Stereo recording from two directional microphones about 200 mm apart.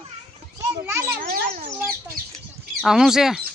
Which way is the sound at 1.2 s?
45° right (ahead or behind).